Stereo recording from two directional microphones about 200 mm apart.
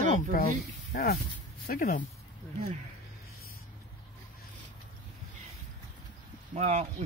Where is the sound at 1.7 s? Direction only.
45° left (ahead or behind).